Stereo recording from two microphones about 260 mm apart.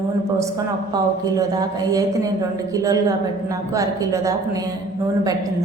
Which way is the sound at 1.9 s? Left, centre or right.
Centre.